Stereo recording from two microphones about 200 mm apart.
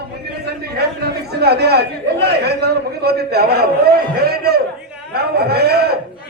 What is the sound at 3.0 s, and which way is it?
A man's voice, 50° right (ahead or behind).